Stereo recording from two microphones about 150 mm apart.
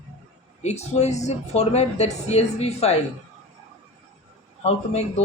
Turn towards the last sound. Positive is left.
turn(degrees=45)  # may be behind; listen again after turning